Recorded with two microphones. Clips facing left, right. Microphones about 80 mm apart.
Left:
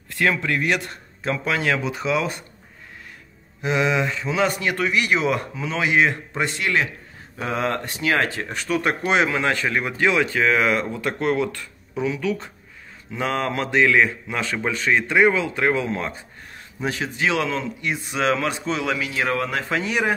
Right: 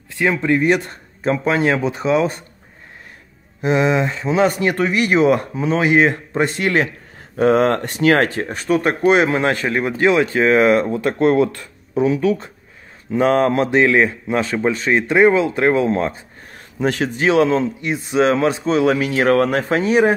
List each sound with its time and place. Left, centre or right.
0.2 s speech: right
3.6 s speech: right
7.3 s speech: right
16.8 s speech: right
17.2 s speech: right
18.9 s speech: right
19.7 s speech: right